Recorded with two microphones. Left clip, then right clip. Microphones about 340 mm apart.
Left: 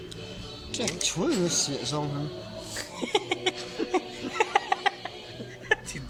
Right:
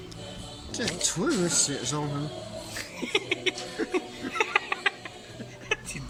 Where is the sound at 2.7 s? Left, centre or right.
Left.